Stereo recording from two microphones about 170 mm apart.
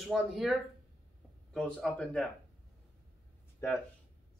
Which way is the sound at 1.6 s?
5° left (ahead or behind).